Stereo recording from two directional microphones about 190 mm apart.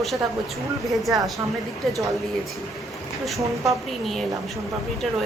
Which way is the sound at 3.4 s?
15° right (ahead or behind).